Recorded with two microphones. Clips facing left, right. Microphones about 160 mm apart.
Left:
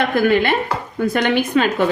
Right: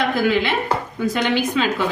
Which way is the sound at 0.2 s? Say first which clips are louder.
Left 3 dB; 55° left (ahead or behind).